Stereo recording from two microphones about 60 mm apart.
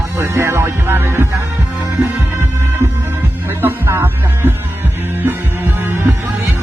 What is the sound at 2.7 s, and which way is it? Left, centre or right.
Music, right.